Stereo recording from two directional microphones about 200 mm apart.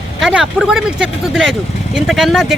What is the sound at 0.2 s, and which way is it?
Speech, centre (ahead or behind).